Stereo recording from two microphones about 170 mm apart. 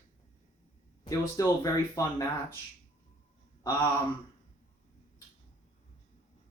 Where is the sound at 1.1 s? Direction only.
20° left (ahead or behind).